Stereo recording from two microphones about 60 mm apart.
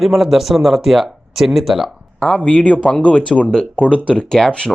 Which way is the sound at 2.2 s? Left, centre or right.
Centre.